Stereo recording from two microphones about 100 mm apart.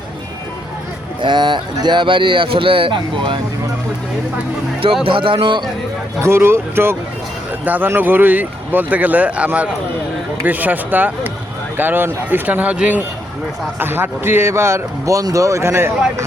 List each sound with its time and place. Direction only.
1.2 s speech: 50° right (ahead or behind)
5.0 s speech: 60° right (ahead or behind)
6.2 s a man's voice: 25° right (ahead or behind)